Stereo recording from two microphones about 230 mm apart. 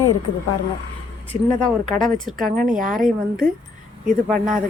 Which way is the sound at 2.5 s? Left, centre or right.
Right.